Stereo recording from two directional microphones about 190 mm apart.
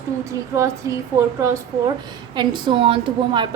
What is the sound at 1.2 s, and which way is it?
A woman's voice, 15° right (ahead or behind).